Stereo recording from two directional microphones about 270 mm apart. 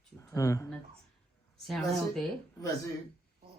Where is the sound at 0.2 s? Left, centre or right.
Centre.